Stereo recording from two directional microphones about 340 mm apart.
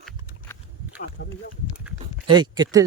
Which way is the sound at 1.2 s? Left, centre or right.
Left.